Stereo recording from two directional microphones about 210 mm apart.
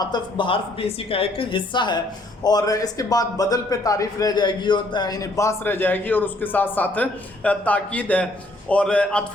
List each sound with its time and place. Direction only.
0.0 s a man's voice: 20° left (ahead or behind); by 9.2 s 5° left (ahead or behind)